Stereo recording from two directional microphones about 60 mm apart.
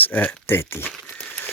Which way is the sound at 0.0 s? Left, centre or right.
Left.